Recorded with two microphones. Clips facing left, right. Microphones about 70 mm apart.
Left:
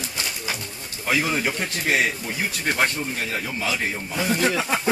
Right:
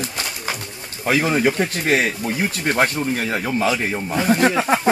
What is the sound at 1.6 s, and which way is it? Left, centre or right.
Speech, right.